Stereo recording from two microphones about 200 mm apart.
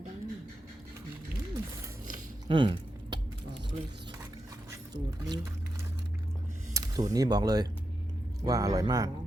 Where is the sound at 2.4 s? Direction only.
25° right (ahead or behind).